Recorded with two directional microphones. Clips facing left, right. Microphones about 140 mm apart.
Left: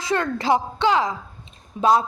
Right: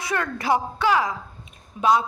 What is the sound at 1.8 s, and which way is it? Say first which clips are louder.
Speech: left 2 dB; 35° left (ahead or behind).